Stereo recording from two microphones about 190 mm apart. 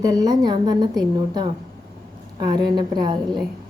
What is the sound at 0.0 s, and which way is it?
A woman's voice, 20° right (ahead or behind).